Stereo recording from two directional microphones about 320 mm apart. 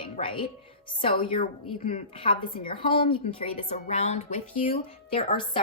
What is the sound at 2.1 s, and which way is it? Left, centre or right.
A woman's voice, centre.